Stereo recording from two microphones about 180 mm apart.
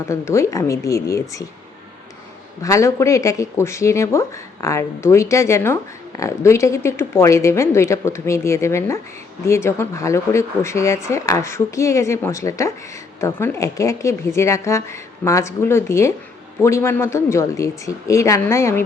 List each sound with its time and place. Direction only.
0.1 s speech: 15° left (ahead or behind)
2.6 s speech: 15° left (ahead or behind)